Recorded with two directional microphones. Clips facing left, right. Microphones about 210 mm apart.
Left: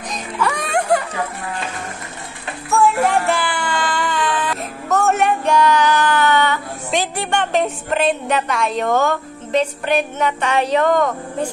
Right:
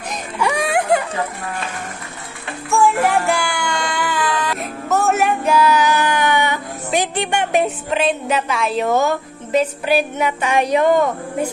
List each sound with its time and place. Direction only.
0.1 s music: 15° right (ahead or behind)
2.7 s music: centre (ahead or behind)